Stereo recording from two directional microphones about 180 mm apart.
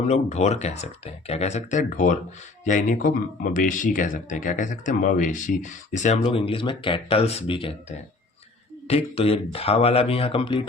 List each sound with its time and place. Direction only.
0.1 s speech: 40° left (ahead or behind)